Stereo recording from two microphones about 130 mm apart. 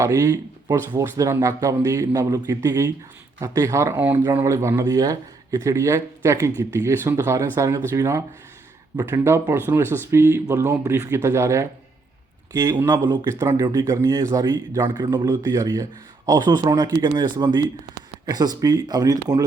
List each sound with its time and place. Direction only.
0.0 s speech: 25° right (ahead or behind)